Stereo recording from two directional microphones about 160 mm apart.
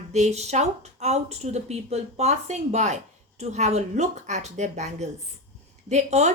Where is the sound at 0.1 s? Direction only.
45° right (ahead or behind).